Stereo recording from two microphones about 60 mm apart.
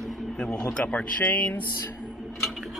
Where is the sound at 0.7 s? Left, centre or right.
Left.